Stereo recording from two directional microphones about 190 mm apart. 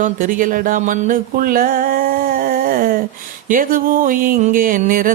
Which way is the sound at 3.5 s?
45° right (ahead or behind).